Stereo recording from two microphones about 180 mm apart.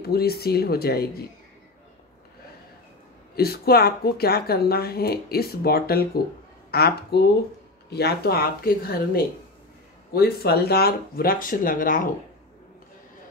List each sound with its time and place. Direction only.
0.0 s speech: 60° left (ahead or behind)
3.3 s speech: 60° left (ahead or behind)